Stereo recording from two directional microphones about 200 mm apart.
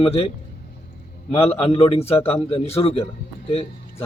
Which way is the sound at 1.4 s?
30° left (ahead or behind).